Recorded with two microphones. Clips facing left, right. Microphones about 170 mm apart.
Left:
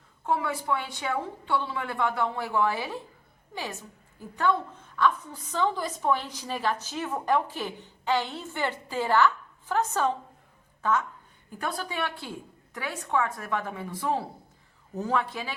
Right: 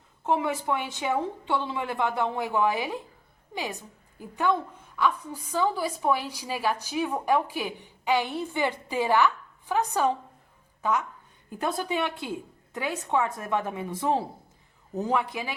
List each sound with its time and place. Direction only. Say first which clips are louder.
0.3 s a woman's voice: right 2 dB; 20° right (ahead or behind)
11.6 s a woman's voice: right 4 dB; 20° right (ahead or behind)